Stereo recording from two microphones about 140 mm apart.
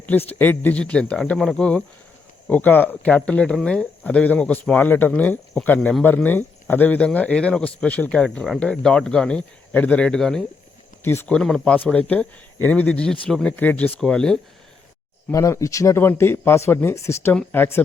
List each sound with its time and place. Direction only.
0.0 s speech: 10° left (ahead or behind)
11.0 s speech: 15° left (ahead or behind)
15.3 s speech: 20° left (ahead or behind)